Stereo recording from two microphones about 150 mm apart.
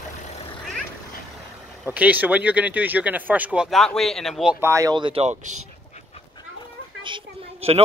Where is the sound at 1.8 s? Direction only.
10° right (ahead or behind).